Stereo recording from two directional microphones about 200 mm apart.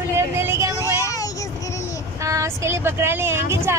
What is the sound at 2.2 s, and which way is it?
Speech, 15° right (ahead or behind).